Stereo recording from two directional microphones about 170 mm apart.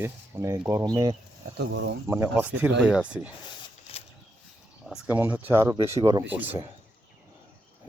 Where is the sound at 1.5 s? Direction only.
85° right.